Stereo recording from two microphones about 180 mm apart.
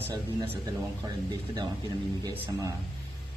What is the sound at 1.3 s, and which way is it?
Speech, 25° right (ahead or behind).